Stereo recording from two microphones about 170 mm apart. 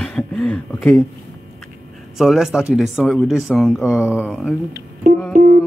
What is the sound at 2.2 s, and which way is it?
Speech, 5° right (ahead or behind).